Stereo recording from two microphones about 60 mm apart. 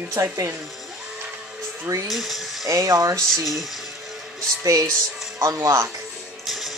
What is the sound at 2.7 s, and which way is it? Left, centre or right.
Speech, right.